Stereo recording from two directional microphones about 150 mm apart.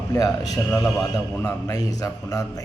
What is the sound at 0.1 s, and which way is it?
Speech, 20° left (ahead or behind).